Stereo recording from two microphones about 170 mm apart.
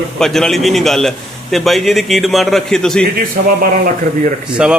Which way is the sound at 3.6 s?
55° right (ahead or behind).